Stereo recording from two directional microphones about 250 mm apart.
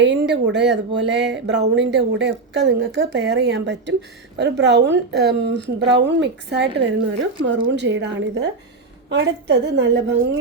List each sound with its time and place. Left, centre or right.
0.4 s speech: right